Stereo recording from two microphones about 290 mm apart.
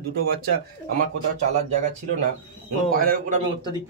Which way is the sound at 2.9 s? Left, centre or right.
Right.